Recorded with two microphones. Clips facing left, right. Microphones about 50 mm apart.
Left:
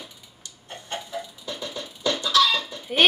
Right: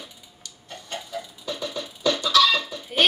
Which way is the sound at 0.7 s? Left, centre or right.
Left.